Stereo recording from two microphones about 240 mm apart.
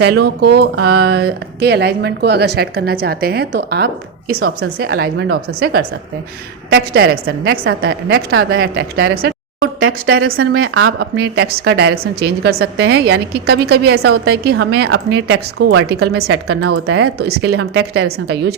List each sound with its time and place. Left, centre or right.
0.0 s speech: right
4.4 s a woman's voice: right
5.5 s a woman's voice: right
9.8 s speech: right
10.3 s speech: right
10.6 s a woman's voice: right
11.0 s a woman's voice: right